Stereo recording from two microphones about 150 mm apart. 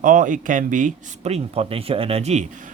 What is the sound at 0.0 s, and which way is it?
Speech, 60° right (ahead or behind).